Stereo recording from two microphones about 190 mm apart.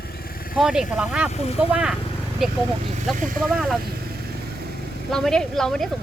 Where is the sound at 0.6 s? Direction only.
5° right (ahead or behind).